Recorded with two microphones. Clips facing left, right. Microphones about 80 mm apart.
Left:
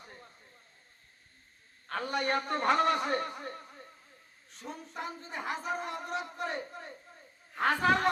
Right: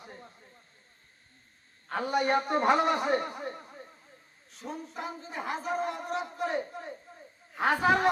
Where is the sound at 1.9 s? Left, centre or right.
Centre.